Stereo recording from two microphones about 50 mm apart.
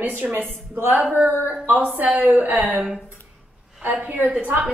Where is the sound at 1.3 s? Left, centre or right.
Right.